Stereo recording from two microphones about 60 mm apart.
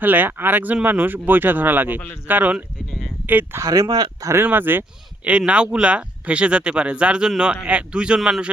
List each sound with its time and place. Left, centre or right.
0.0 s speech: right
3.7 s speech: right
4.4 s speech: right
5.5 s speech: centre